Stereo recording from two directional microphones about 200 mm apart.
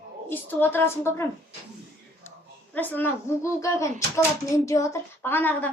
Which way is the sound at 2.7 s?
10° left (ahead or behind).